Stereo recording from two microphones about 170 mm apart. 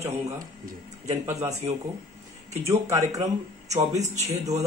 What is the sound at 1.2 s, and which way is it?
Speech, 20° right (ahead or behind).